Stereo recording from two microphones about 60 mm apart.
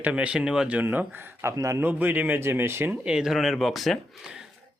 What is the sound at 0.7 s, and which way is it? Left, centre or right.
Speech, right.